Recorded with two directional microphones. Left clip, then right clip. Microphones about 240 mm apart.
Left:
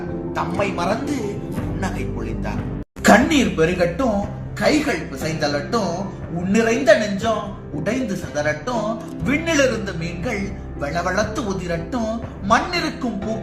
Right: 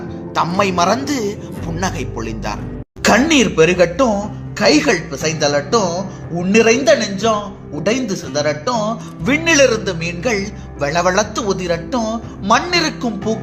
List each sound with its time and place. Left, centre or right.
0.3 s speech: right